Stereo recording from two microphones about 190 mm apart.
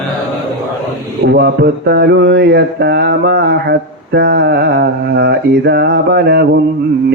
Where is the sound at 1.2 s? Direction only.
60° right (ahead or behind).